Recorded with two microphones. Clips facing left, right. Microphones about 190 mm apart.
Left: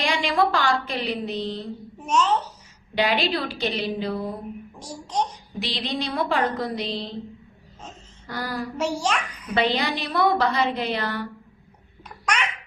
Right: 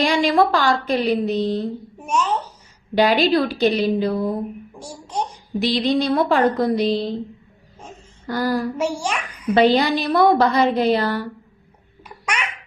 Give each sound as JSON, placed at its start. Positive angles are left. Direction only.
{"t": 0.0, "sound": "a woman's voice", "side_deg": -40}
{"t": 2.0, "sound": "a child's voice", "side_deg": -10}
{"t": 2.9, "sound": "a woman's voice", "side_deg": -40}
{"t": 4.8, "sound": "a child's voice", "side_deg": -10}
{"t": 5.5, "sound": "a woman's voice", "side_deg": -45}
{"t": 8.3, "sound": "a woman's voice", "side_deg": -45}
{"t": 8.8, "sound": "a child's voice", "side_deg": -10}
{"t": 9.6, "sound": "a woman's voice", "side_deg": -40}
{"t": 12.0, "sound": "babbling", "side_deg": -10}